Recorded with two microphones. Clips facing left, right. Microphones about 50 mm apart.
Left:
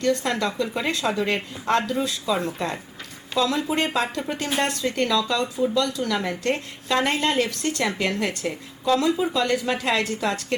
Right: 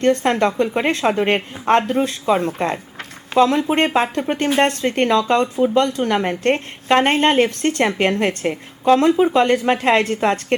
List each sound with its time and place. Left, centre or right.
0.0 s a woman's voice: right